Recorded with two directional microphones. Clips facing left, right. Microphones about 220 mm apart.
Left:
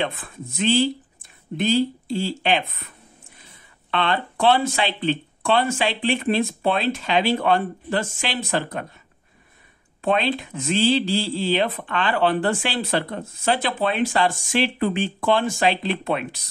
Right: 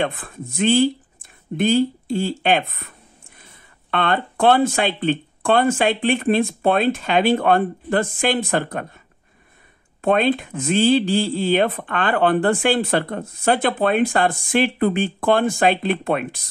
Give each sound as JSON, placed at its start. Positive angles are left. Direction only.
{"t": 0.0, "sound": "speech", "side_deg": -50}
{"t": 10.0, "sound": "speech", "side_deg": -50}